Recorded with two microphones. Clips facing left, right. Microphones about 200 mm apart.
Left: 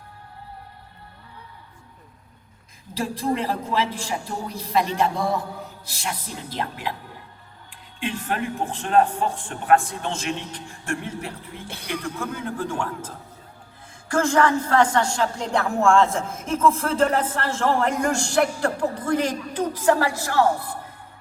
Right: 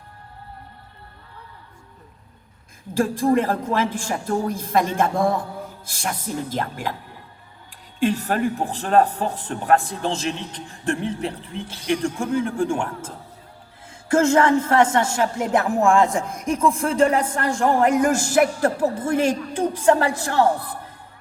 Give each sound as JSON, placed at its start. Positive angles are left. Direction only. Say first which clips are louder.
{"t": 2.9, "sound": "a man's voice", "louder": "right 7 dB", "side_deg": -50}
{"t": 7.9, "sound": "a man's voice", "louder": "right 6 dB", "side_deg": -40}
{"t": 14.1, "sound": "a woman's voice", "louder": "right 3 dB", "side_deg": -25}